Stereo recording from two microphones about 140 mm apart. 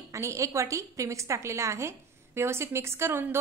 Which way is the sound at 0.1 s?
20° right (ahead or behind).